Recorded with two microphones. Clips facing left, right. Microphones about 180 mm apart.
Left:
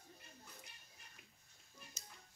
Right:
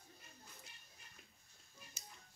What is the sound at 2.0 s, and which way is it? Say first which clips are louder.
Music: right 1 dB; 10° right (ahead or behind).